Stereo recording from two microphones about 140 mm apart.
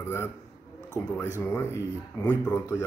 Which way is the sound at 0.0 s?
20° left (ahead or behind).